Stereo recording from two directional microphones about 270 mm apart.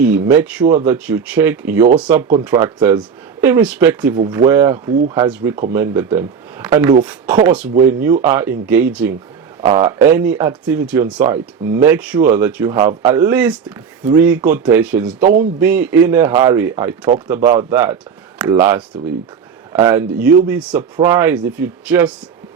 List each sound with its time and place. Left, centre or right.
0.0 s a man's voice: centre
15.2 s speech: right
15.6 s speech: centre